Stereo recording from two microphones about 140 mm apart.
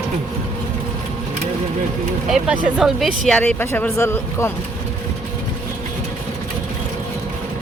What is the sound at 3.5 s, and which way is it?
Speech, 15° left (ahead or behind).